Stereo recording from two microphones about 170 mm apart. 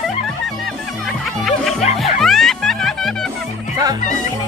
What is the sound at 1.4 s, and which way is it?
Music, centre (ahead or behind).